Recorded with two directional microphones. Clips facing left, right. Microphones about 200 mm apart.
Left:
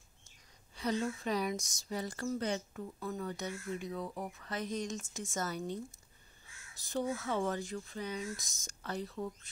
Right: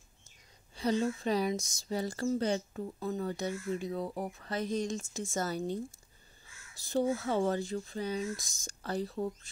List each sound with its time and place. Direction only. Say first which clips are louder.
0.7 s speech: right 4 dB; 30° right (ahead or behind)
6.8 s speech: right 5 dB; 30° right (ahead or behind)